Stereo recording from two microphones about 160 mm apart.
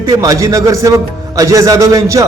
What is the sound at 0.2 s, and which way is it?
A man's voice, 20° right (ahead or behind).